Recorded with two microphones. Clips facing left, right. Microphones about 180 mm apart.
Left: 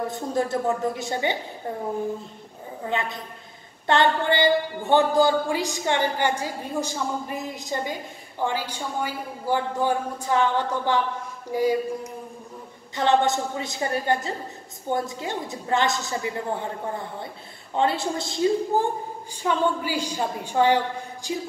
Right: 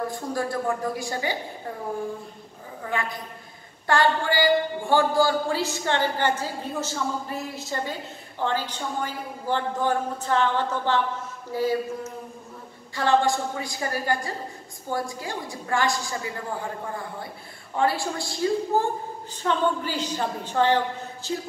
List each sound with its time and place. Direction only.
0.1 s a woman's voice: 20° left (ahead or behind)
2.8 s a woman's voice: 20° left (ahead or behind)
19.4 s a woman's voice: 10° left (ahead or behind)